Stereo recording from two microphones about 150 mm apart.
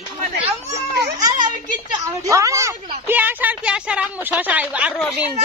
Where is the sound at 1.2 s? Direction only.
30° right (ahead or behind).